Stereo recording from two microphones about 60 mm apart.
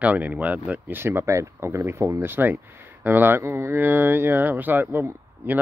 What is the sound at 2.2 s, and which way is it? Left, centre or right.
Speech, right.